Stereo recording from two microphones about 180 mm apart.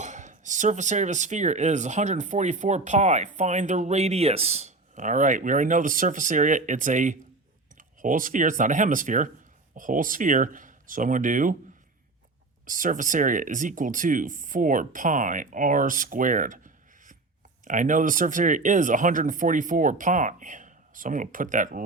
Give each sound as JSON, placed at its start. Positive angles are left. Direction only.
{"t": 0.0, "sound": "speech", "side_deg": -40}
{"t": 12.6, "sound": "speech", "side_deg": -50}